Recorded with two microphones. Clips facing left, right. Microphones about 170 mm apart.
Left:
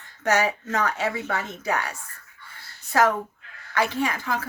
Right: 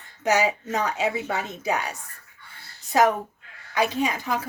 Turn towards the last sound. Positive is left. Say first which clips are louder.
# right 1 dB
turn(degrees=-15)  # may be behind; listen again after turning